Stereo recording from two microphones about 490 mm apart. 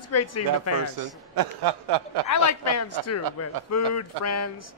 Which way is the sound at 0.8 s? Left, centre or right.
Right.